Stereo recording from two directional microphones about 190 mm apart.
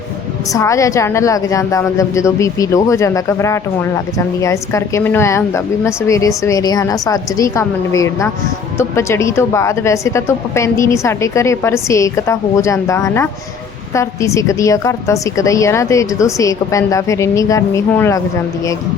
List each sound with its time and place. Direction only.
0.5 s a woman's voice: 15° left (ahead or behind)